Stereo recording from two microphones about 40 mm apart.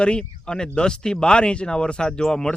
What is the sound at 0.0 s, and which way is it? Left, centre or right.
Speech, left.